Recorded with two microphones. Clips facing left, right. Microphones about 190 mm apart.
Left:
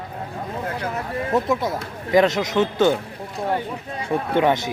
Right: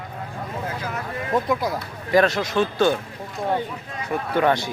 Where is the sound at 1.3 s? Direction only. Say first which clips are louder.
Left 1 dB; centre (ahead or behind).